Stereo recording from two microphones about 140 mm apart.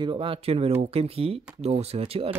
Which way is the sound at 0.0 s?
35° right (ahead or behind).